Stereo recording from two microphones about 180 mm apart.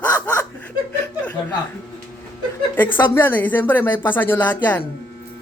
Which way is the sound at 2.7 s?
10° left (ahead or behind).